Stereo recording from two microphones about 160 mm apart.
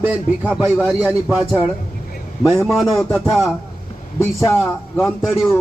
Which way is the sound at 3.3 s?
Centre (ahead or behind).